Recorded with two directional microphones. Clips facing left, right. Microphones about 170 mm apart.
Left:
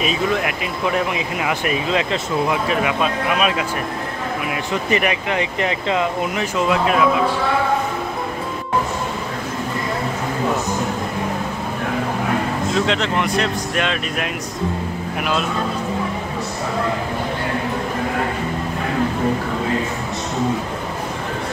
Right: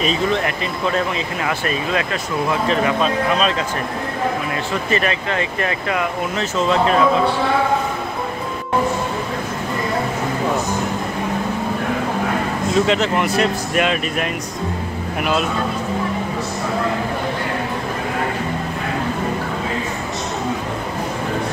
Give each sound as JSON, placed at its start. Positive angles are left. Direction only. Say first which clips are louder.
{"t": 0.0, "sound": "speech", "louder": "right 1 dB", "side_deg": 5}
{"t": 2.5, "sound": "speech", "louder": "right 2 dB", "side_deg": 10}
{"t": 4.8, "sound": "speech", "louder": "left 2 dB", "side_deg": 15}
{"t": 12.7, "sound": "speech", "louder": "right 4 dB", "side_deg": -5}